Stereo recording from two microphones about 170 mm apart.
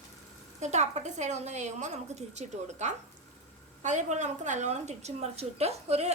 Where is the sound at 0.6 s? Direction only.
40° right (ahead or behind).